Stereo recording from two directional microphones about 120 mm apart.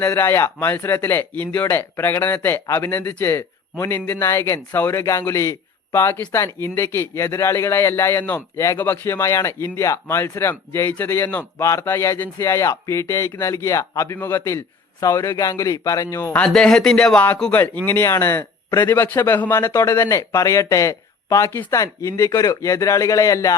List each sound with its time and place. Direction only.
0.1 s speech: 20° left (ahead or behind)
16.3 s speech: 10° left (ahead or behind); by 23.6 s 25° left (ahead or behind)